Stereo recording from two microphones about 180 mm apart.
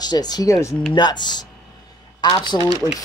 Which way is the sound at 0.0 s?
20° left (ahead or behind).